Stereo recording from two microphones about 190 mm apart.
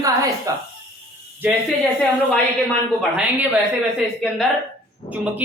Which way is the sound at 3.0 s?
5° right (ahead or behind).